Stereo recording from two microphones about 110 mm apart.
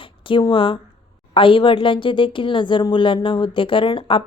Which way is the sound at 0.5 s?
55° left (ahead or behind).